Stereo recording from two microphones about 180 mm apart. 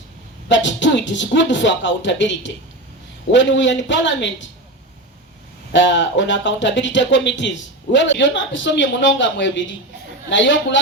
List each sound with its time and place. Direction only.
0.4 s speech: 90° left
5.7 s speech: 80° left